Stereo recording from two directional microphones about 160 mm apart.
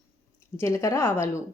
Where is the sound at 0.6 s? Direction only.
15° left (ahead or behind).